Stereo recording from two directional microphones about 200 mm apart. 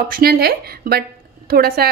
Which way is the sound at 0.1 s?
50° right (ahead or behind).